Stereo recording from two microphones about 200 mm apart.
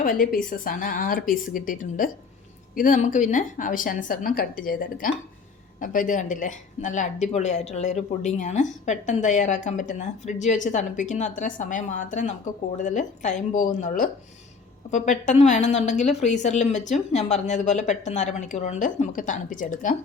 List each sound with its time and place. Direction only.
0.0 s a woman's voice: 45° left (ahead or behind)